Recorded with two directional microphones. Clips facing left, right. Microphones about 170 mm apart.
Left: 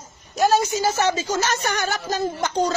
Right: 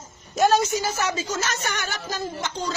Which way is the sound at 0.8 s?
30° left (ahead or behind).